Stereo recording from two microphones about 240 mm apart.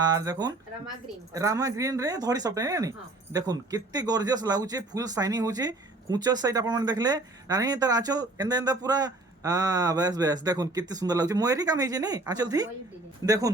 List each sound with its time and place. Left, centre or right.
0.0 s speech: centre